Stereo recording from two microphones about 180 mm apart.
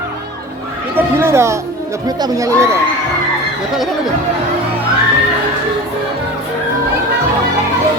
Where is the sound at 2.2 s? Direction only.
15° right (ahead or behind).